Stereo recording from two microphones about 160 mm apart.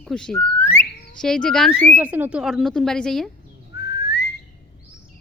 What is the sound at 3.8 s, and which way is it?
Whistling, 90° left.